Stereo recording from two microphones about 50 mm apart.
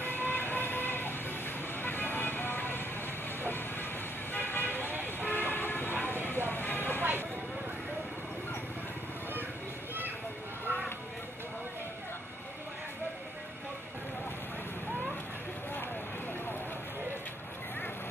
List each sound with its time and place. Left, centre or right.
0.0 s vehicle: left
3.4 s train: left
4.3 s vehicle: left
5.5 s train: left
6.5 s vehicle: left
7.0 s vehicle: right
10.7 s a sound: right